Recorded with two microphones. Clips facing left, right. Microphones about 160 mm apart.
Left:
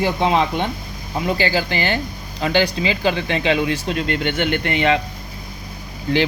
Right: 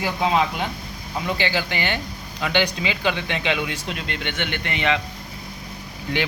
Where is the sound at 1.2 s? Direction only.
40° left (ahead or behind).